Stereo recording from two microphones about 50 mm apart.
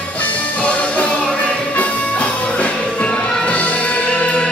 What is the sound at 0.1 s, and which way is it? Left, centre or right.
Music, left.